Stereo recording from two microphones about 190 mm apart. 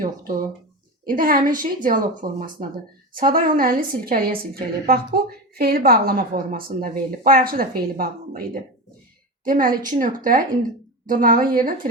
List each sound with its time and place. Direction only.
0.0 s a woman's voice: 45° right (ahead or behind)